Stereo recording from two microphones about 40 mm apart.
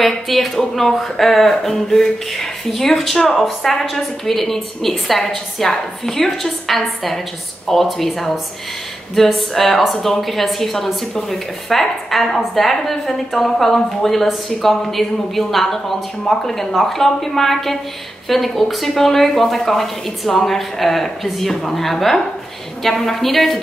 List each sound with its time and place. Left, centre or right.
0.0 s speech: centre